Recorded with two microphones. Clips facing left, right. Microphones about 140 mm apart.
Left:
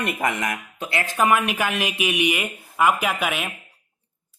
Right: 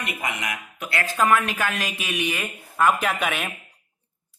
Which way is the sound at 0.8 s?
20° left (ahead or behind).